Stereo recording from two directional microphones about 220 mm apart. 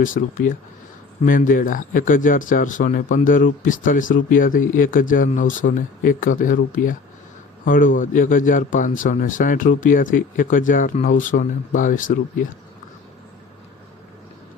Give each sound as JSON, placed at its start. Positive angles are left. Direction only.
{"t": 0.0, "sound": "speech", "side_deg": 35}